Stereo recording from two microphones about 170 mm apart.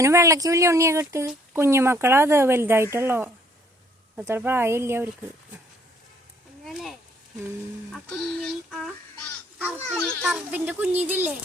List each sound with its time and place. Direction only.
0.0 s speech: 15° right (ahead or behind)
6.7 s speech: centre (ahead or behind)
8.4 s a sound: centre (ahead or behind)
9.6 s speech: 10° right (ahead or behind)
9.9 s a sound: 5° left (ahead or behind)
10.3 s speech: 10° right (ahead or behind)